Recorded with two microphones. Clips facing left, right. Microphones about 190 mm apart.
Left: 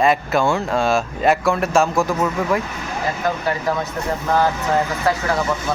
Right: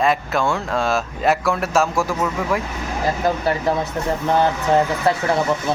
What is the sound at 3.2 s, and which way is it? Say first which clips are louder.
Speech: right 2 dB; 30° right (ahead or behind).